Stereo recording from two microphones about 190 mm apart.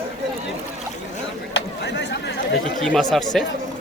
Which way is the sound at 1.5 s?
65° left (ahead or behind).